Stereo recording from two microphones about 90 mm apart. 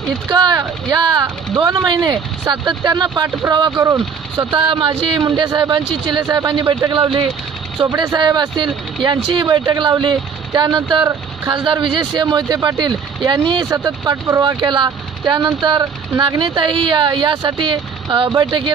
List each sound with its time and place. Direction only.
0.3 s speech: 55° right (ahead or behind)
7.0 s speech: 70° right (ahead or behind)
8.2 s speech: 55° right (ahead or behind)
13.7 s speech: 40° right (ahead or behind)
14.6 s speech: 60° right (ahead or behind)